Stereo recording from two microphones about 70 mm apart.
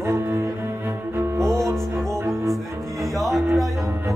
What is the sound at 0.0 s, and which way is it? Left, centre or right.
Cello, right.